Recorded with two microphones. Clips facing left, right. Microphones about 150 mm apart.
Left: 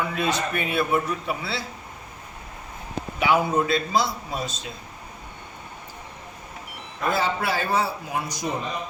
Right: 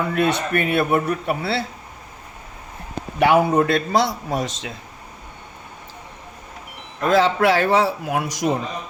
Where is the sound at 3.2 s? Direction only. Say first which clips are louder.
Right 6 dB; 75° right (ahead or behind); by 4.7 s 90° right.